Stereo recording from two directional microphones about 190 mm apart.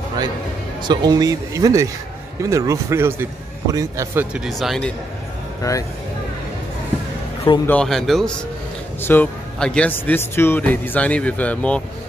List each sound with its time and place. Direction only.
0.8 s a man's voice: 20° right (ahead or behind)
4.5 s speech: centre (ahead or behind)
5.6 s a man's voice: 15° left (ahead or behind)
7.6 s a man's voice: 5° left (ahead or behind)